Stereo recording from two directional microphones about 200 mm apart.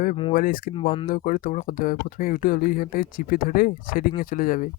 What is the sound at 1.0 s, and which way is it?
Speech, 45° left (ahead or behind).